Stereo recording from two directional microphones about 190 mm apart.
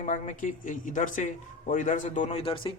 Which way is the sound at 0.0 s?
40° left (ahead or behind).